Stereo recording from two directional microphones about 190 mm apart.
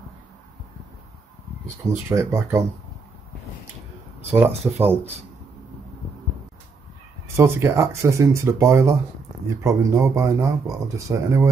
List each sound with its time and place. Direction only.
1.9 s speech: 15° right (ahead or behind)
4.3 s speech: 10° right (ahead or behind)
7.3 s speech: 15° right (ahead or behind)